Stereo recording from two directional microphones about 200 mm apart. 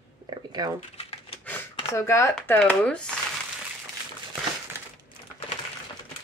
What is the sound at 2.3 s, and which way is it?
Speech, 5° left (ahead or behind).